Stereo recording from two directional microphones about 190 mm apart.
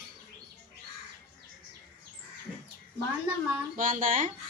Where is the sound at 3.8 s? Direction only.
45° right (ahead or behind).